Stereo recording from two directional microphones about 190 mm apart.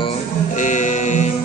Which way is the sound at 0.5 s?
40° left (ahead or behind).